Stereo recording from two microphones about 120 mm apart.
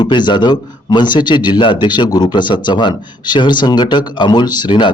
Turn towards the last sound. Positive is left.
turn(degrees=40)  # may be behind; listen again after turning